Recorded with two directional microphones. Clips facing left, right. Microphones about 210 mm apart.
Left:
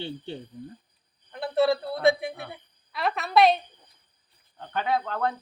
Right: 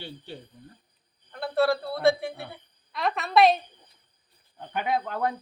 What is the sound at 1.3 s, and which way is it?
A man's voice, 20° left (ahead or behind).